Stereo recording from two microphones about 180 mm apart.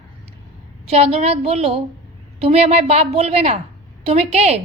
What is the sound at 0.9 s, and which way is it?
A woman's voice, 35° right (ahead or behind).